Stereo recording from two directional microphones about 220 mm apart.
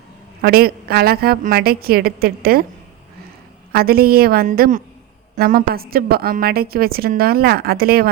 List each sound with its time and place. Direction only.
0.4 s a woman's voice: 45° right (ahead or behind)
3.7 s a woman's voice: 45° right (ahead or behind)